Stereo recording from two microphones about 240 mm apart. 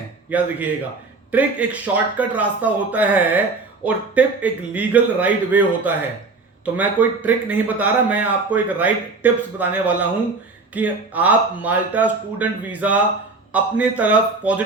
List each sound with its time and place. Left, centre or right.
0.3 s a man's voice: centre